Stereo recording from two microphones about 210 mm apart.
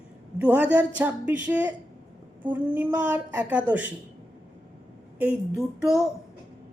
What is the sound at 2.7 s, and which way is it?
A woman's voice, 10° right (ahead or behind).